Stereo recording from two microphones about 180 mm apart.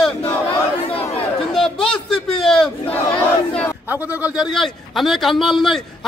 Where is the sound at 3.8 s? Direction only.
10° right (ahead or behind).